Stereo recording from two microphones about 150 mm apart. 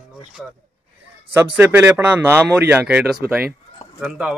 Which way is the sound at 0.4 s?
5° right (ahead or behind).